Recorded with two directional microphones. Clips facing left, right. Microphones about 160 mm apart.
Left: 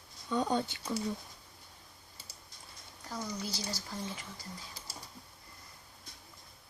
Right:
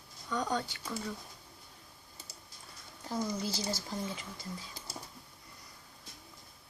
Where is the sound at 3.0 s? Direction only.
25° right (ahead or behind).